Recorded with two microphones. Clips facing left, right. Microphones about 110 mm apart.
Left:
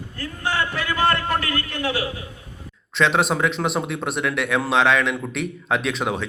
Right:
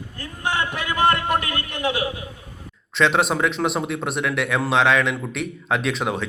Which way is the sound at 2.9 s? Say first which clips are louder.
Even; centre (ahead or behind).